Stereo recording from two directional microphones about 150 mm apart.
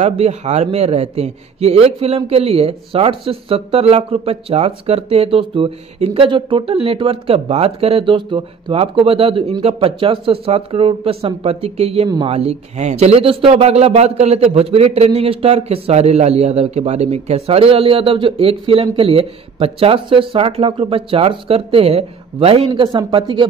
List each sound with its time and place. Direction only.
0.0 s a man's voice: 45° right (ahead or behind)